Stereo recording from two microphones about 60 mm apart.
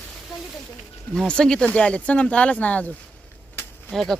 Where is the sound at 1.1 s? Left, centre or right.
Centre.